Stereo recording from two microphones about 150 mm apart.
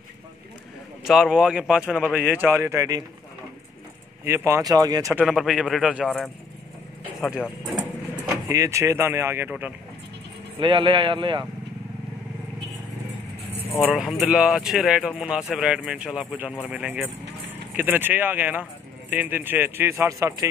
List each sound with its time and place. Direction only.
1.0 s speech: centre (ahead or behind)
2.3 s speech: 15° right (ahead or behind)
4.2 s speech: 15° right (ahead or behind)
5.2 s speech: centre (ahead or behind)
8.5 s speech: 20° right (ahead or behind)
10.6 s a man's voice: 35° right (ahead or behind)
13.9 s speech: centre (ahead or behind); by 20.4 s 20° right (ahead or behind)